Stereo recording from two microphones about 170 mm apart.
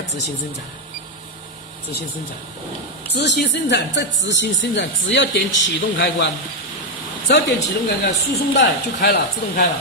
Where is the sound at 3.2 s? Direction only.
90° left.